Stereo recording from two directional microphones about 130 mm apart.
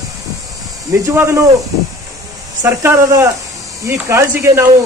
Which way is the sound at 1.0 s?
20° right (ahead or behind).